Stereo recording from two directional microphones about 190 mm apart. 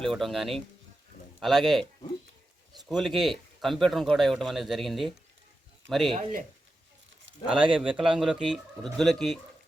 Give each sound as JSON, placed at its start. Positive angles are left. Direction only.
{"t": 0.0, "sound": "speech", "side_deg": 0}
{"t": 2.9, "sound": "speech", "side_deg": 0}
{"t": 7.3, "sound": "a sound", "side_deg": -75}
{"t": 7.6, "sound": "speech", "side_deg": -5}